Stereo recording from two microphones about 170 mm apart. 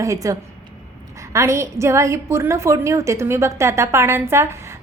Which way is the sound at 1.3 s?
15° right (ahead or behind).